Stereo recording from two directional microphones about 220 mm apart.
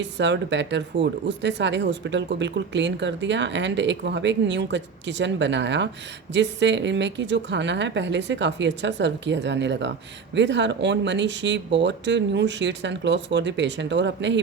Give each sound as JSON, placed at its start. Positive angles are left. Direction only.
{"t": 0.0, "sound": "speech", "side_deg": -55}